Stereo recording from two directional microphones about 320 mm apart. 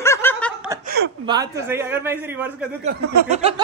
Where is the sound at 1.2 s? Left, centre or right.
Centre.